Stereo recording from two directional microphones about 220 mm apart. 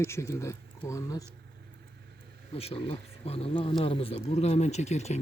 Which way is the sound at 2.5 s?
25° left (ahead or behind).